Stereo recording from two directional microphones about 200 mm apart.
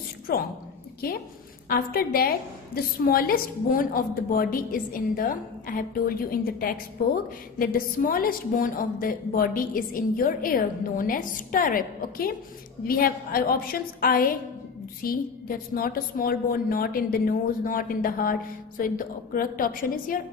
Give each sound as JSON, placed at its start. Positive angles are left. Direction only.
{"t": 0.3, "sound": "a woman's voice", "side_deg": 50}
{"t": 1.7, "sound": "a woman's voice", "side_deg": 50}